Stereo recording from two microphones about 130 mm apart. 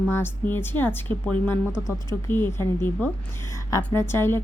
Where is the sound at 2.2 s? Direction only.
15° left (ahead or behind).